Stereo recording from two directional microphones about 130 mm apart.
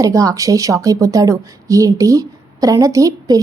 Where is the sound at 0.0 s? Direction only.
25° right (ahead or behind).